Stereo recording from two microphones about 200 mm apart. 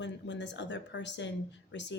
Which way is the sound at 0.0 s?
60° left (ahead or behind).